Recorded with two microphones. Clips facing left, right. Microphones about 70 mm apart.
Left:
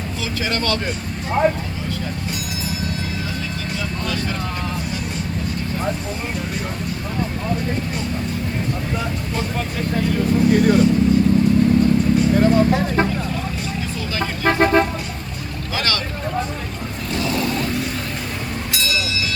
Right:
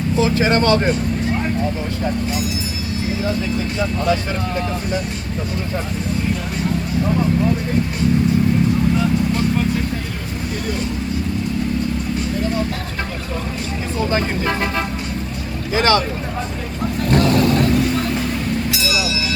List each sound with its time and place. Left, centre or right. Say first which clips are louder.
0.2 s speech: right 8 dB; right
15.7 s speech: right 8 dB; right
18.7 s music: right 2 dB; centre